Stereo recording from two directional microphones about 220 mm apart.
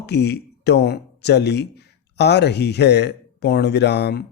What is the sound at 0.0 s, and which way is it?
Speech, 50° left (ahead or behind).